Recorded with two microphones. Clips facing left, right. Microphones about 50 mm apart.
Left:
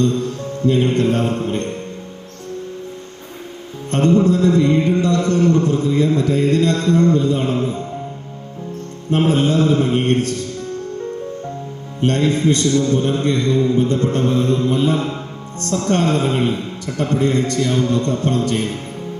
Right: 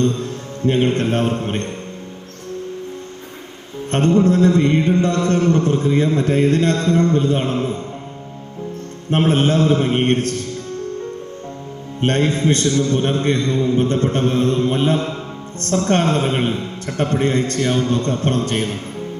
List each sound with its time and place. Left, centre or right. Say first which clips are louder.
0.7 s mantra: left 1 dB; right
3.8 s mantra: left 1 dB; right
9.0 s mantra: even; right
11.9 s mantra: left 1 dB; right